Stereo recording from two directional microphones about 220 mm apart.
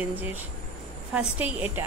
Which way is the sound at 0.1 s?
10° right (ahead or behind).